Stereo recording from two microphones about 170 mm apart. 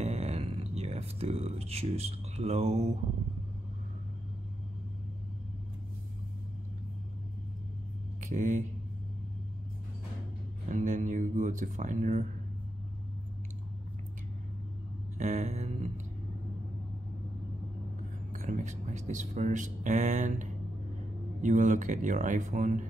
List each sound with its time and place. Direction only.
0.0 s a sound: 40° right (ahead or behind)
8.2 s speech: 50° right (ahead or behind)
10.7 s speech: 50° right (ahead or behind)
15.1 s speech: 45° right (ahead or behind)
18.3 s speech: 45° right (ahead or behind)